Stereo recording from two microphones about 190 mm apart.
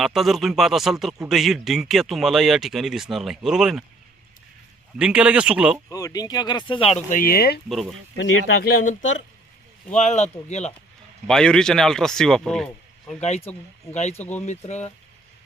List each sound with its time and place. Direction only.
0.0 s speech: centre (ahead or behind)
4.9 s speech: 5° right (ahead or behind)
5.9 s speech: 20° left (ahead or behind)
7.2 s speech: 50° left (ahead or behind)
7.7 s speech: centre (ahead or behind)
8.1 s speech: 65° left (ahead or behind); by 10.3 s 35° left (ahead or behind)
11.3 s speech: 5° left (ahead or behind)
13.2 s speech: 35° left (ahead or behind)
14.2 s speech: 10° left (ahead or behind)
14.4 s speech: 35° left (ahead or behind)